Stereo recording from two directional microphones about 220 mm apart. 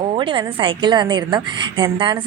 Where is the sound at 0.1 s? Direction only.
20° right (ahead or behind).